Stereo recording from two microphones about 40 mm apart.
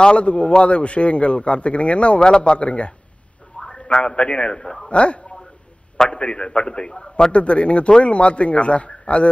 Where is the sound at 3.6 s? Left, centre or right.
Centre.